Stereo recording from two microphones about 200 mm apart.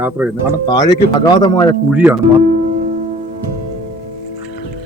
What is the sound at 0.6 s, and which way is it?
Speech, 20° left (ahead or behind).